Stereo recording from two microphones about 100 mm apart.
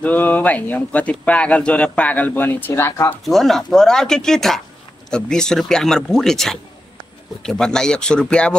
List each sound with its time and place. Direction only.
0.0 s speech: 15° left (ahead or behind)
3.3 s speech: centre (ahead or behind)